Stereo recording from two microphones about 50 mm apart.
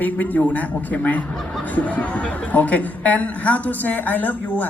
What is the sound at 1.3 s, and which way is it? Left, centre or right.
Speech, centre.